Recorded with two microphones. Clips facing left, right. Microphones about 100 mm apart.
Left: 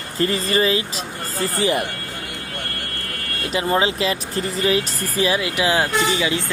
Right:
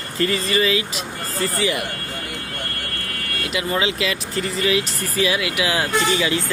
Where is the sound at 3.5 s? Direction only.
35° left (ahead or behind).